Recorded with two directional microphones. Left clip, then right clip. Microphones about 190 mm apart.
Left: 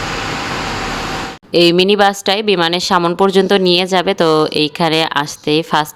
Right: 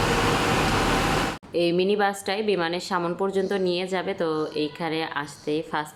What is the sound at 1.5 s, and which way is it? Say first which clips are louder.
A woman's voice: left 12 dB; 50° left (ahead or behind).